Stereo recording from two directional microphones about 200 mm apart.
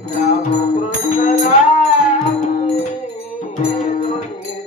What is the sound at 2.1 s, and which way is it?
Music, 35° left (ahead or behind).